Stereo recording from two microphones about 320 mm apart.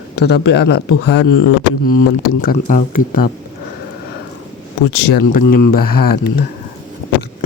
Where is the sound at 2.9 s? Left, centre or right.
Left.